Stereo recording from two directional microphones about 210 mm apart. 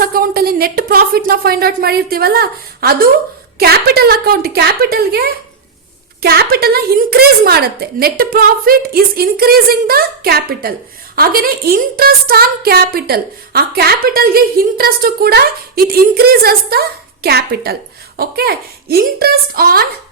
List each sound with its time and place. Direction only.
0.1 s a woman's voice: 45° right (ahead or behind)